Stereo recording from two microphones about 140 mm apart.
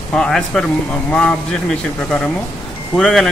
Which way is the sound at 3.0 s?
Centre (ahead or behind).